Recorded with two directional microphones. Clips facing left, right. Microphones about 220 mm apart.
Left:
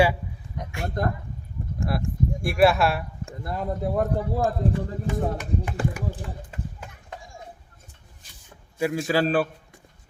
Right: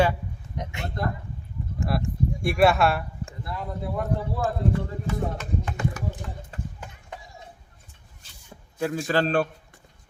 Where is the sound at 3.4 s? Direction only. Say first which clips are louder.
Left 6 dB; 45° left (ahead or behind).